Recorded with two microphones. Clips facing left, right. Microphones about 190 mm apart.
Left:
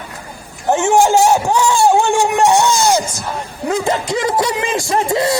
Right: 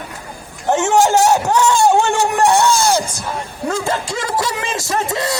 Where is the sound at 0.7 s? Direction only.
10° left (ahead or behind).